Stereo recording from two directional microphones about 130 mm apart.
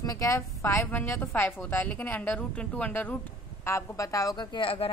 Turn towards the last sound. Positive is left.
turn(degrees=45)  # may be behind; listen again after turning